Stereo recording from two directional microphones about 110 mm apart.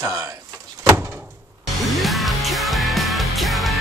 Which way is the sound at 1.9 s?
Centre (ahead or behind).